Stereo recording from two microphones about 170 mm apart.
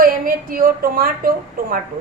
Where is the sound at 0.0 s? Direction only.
60° right (ahead or behind).